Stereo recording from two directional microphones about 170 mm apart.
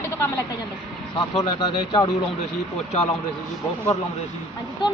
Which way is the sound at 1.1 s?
25° left (ahead or behind).